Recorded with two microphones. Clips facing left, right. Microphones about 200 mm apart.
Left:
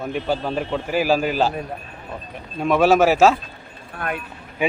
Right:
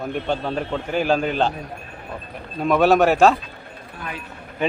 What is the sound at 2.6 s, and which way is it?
Speech, centre (ahead or behind).